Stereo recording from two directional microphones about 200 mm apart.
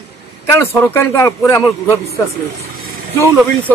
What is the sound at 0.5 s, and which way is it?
A man's voice, 10° left (ahead or behind).